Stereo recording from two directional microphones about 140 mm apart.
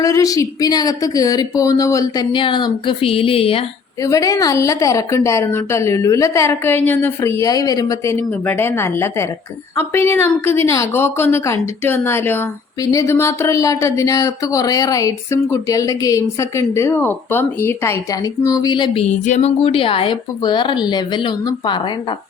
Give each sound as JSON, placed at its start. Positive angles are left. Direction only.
{"t": 0.0, "sound": "speech", "side_deg": 25}
{"t": 2.3, "sound": "a woman's voice", "side_deg": 35}
{"t": 4.0, "sound": "a woman's voice", "side_deg": 25}
{"t": 19.2, "sound": "speech", "side_deg": 60}
{"t": 19.6, "sound": "a woman's voice", "side_deg": 40}